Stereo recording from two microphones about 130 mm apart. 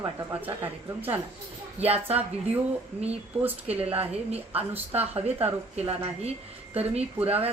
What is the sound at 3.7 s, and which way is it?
A woman's voice, 50° right (ahead or behind).